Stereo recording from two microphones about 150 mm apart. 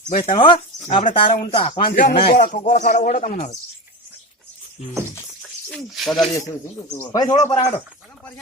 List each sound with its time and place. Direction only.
0.3 s speech: 35° left (ahead or behind)
1.9 s speech: 65° left (ahead or behind); by 3.6 s 50° left (ahead or behind)
5.4 s speech: 5° left (ahead or behind)
6.9 s speech: 25° left (ahead or behind)